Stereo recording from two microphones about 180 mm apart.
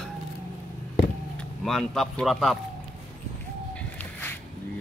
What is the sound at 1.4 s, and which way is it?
Speech, centre (ahead or behind).